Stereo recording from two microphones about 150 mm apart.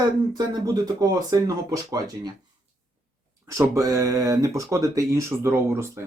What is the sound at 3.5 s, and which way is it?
Speech, 20° right (ahead or behind).